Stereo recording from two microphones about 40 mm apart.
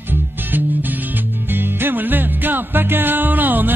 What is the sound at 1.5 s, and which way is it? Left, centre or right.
Music, right.